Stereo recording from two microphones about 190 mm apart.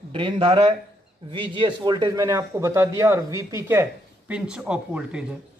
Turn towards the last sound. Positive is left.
turn(degrees=-5)  # may be behind; listen again after turning